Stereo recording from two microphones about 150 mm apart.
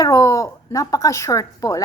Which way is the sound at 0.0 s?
20° left (ahead or behind).